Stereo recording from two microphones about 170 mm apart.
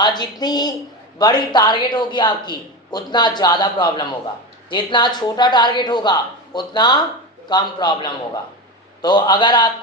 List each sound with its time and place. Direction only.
0.0 s a man's voice: 25° left (ahead or behind)